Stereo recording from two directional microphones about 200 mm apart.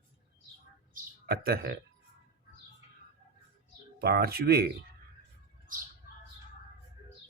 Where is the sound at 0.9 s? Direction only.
50° right (ahead or behind).